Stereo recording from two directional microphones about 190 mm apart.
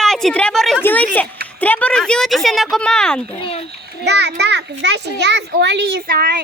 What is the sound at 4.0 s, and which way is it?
A child's voice, 60° right (ahead or behind).